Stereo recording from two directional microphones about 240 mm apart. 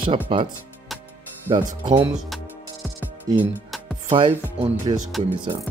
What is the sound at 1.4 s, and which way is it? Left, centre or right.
Speech, centre.